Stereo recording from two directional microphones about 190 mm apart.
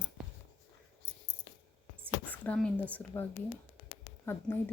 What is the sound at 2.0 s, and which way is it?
Speech, 10° left (ahead or behind).